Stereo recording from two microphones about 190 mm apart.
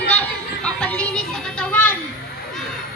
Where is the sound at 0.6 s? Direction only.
5° left (ahead or behind).